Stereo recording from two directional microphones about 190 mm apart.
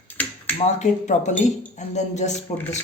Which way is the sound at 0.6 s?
40° left (ahead or behind).